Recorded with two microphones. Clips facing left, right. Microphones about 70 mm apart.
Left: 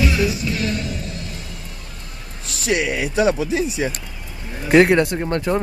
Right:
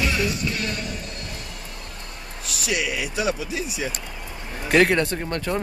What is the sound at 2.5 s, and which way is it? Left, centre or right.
Speech, left.